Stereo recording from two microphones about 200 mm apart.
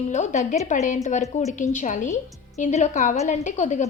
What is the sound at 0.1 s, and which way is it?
A woman's voice, 35° left (ahead or behind).